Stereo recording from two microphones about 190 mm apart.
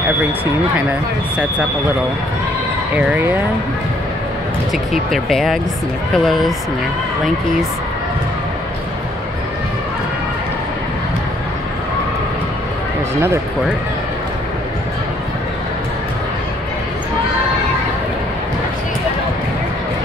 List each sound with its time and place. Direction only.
3.0 s speech: 10° right (ahead or behind)
4.9 s speech: centre (ahead or behind)